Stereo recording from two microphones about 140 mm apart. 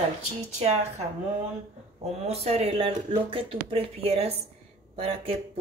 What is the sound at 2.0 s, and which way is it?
Speech, 50° right (ahead or behind).